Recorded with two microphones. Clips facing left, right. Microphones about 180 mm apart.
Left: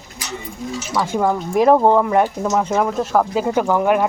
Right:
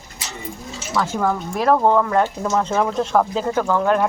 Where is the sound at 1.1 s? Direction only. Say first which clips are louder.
Left 8 dB; 15° left (ahead or behind).